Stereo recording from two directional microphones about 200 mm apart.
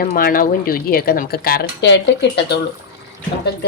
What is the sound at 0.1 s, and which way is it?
A woman's voice, 45° left (ahead or behind).